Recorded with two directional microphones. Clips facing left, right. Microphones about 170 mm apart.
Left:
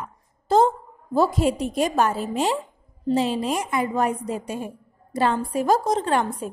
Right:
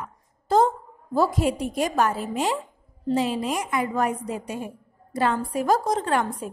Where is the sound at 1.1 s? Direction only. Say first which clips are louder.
Left 2 dB; 25° left (ahead or behind).